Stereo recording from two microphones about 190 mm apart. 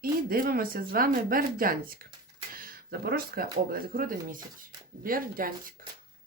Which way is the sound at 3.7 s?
50° right (ahead or behind).